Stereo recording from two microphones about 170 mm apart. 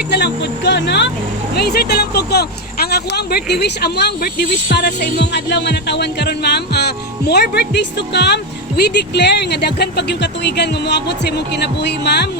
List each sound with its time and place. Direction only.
0.1 s speech: 90° left
1.5 s speech: 70° left (ahead or behind)